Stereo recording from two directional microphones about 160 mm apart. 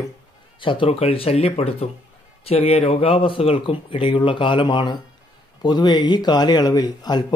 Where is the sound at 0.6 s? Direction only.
30° left (ahead or behind).